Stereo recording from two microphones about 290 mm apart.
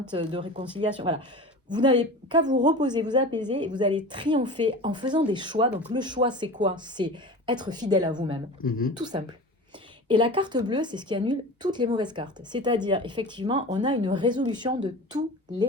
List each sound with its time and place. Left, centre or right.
0.1 s a woman's voice: centre